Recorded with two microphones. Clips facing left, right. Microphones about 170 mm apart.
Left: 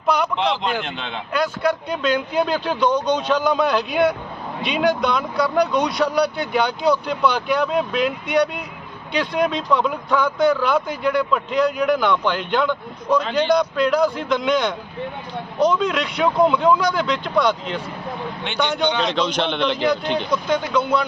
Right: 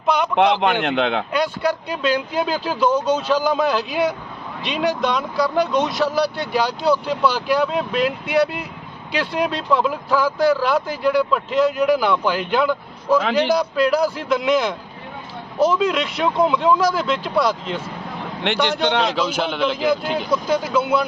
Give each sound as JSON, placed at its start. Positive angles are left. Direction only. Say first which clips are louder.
{"t": 0.3, "sound": "a man's voice", "louder": "right 5 dB", "side_deg": -60}
{"t": 1.9, "sound": "speech", "louder": "even", "side_deg": -5}
{"t": 18.4, "sound": "a man's voice", "louder": "right 2 dB", "side_deg": -70}
{"t": 19.0, "sound": "speech", "louder": "even", "side_deg": -5}